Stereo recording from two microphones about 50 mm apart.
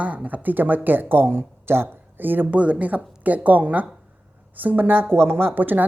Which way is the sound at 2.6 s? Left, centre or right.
Right.